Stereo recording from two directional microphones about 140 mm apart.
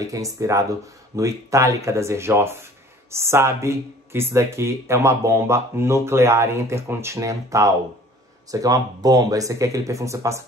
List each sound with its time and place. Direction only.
0.0 s speech: 25° right (ahead or behind)